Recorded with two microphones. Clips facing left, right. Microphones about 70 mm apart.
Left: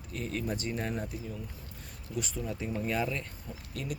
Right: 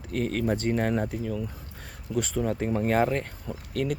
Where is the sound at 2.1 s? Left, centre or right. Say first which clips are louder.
Right 8 dB; right.